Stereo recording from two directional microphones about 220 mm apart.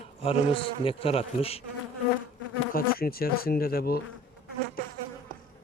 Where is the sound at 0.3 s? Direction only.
25° left (ahead or behind).